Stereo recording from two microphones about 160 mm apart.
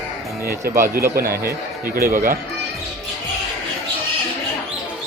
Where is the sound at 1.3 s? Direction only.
20° right (ahead or behind).